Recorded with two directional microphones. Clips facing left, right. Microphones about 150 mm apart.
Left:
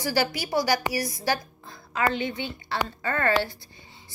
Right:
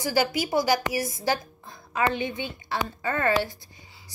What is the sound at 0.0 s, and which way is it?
A woman's voice, 20° right (ahead or behind).